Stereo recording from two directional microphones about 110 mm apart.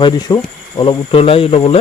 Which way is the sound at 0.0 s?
35° left (ahead or behind).